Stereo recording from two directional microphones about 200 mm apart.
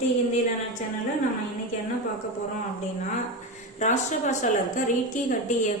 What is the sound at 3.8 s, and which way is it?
A woman's voice, 35° left (ahead or behind).